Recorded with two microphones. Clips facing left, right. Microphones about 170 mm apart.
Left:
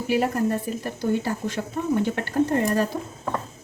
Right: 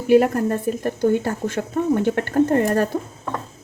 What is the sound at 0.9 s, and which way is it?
A woman's voice, 50° right (ahead or behind).